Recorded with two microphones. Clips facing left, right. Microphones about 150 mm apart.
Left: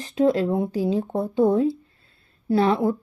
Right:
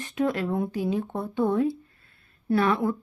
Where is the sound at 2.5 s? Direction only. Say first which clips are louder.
Left 3 dB; 25° left (ahead or behind).